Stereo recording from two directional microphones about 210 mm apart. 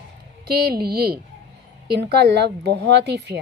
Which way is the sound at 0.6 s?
45° right (ahead or behind).